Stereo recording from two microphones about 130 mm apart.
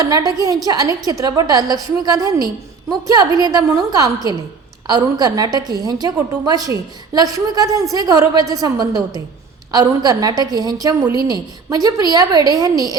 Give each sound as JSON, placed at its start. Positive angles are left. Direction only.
{"t": 0.0, "sound": "a woman's voice", "side_deg": -30}